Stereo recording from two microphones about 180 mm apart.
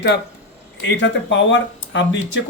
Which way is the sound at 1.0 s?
90° left.